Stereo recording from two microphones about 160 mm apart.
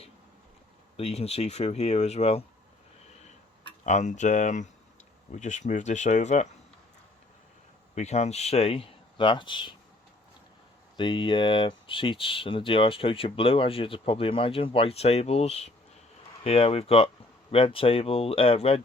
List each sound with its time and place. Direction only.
0.9 s speech: 40° left (ahead or behind)
3.8 s speech: 50° left (ahead or behind)
7.9 s speech: 45° left (ahead or behind)
10.9 s speech: 30° left (ahead or behind)